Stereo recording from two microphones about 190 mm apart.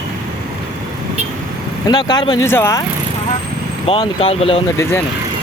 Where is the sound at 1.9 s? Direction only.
20° left (ahead or behind).